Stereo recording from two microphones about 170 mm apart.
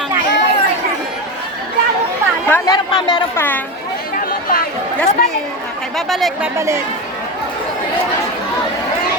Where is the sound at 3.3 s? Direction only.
10° left (ahead or behind).